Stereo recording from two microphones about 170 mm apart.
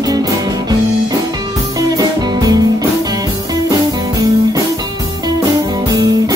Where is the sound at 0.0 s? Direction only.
20° right (ahead or behind).